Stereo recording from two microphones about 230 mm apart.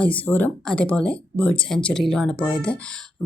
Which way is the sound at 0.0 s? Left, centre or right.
Centre.